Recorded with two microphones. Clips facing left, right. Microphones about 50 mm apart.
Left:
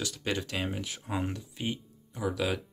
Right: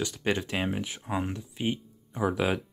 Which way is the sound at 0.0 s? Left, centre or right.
Centre.